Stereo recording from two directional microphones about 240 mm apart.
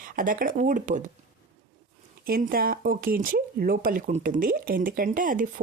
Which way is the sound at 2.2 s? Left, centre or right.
Right.